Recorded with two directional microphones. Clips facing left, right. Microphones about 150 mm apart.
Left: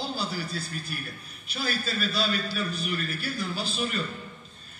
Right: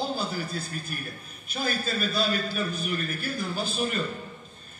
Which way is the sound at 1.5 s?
50° right (ahead or behind).